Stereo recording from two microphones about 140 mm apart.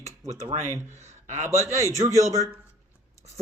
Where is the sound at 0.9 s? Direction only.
55° right (ahead or behind).